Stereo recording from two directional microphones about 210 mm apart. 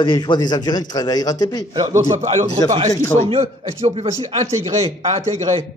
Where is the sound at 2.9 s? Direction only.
15° left (ahead or behind).